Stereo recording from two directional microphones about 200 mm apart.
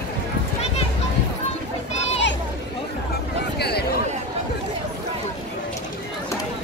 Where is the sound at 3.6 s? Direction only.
55° left (ahead or behind).